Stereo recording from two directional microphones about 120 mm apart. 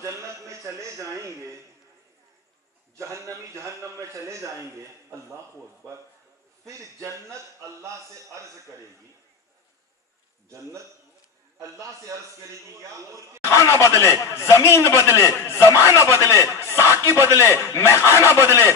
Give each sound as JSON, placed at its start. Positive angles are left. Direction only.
{"t": 0.0, "sound": "a man's voice", "side_deg": -25}
{"t": 3.0, "sound": "a man's voice", "side_deg": -25}
{"t": 6.6, "sound": "a man's voice", "side_deg": -25}
{"t": 11.6, "sound": "a man's voice", "side_deg": -25}
{"t": 13.4, "sound": "speech", "side_deg": 25}